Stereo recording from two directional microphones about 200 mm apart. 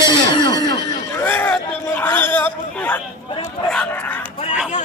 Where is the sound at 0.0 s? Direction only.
20° left (ahead or behind).